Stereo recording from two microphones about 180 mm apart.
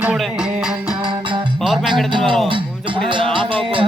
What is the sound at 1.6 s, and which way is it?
Music, centre (ahead or behind).